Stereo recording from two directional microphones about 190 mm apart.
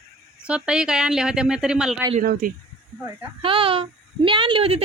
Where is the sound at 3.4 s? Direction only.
30° right (ahead or behind).